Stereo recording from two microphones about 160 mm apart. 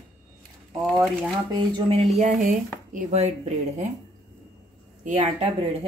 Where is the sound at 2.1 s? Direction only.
50° right (ahead or behind).